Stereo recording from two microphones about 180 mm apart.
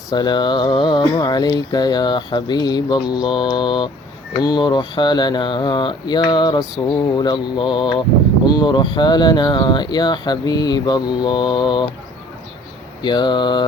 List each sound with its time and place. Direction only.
0.1 s speech: 25° left (ahead or behind)
13.0 s speech: 25° left (ahead or behind)